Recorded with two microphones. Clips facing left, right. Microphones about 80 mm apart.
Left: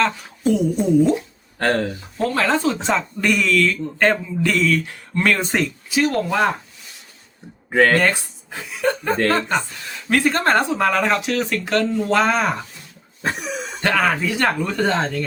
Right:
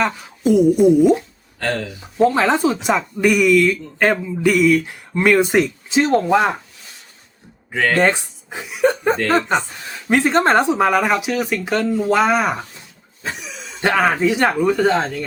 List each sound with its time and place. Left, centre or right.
0.0 s speech: centre
1.5 s speech: left
2.1 s speech: centre
5.9 s speech: right
7.7 s speech: left
7.9 s speech: right
13.2 s cough: left
14.2 s speech: centre